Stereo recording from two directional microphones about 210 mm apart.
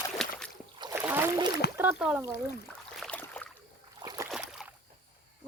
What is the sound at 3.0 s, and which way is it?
Boat, 5° left (ahead or behind).